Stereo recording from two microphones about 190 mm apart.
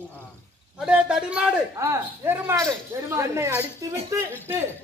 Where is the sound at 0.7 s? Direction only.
5° right (ahead or behind).